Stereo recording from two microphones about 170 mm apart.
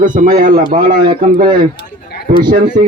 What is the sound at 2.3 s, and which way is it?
Speech, 50° right (ahead or behind).